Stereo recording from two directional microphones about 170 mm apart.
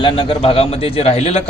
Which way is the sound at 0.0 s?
30° left (ahead or behind).